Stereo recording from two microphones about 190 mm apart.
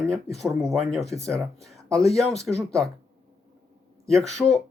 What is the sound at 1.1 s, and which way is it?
Speech, 15° right (ahead or behind).